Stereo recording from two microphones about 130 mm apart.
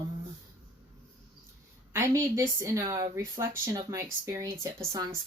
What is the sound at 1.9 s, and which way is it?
Speech, 20° right (ahead or behind).